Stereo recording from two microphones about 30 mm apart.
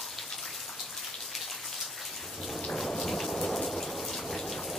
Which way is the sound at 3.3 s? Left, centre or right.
Left.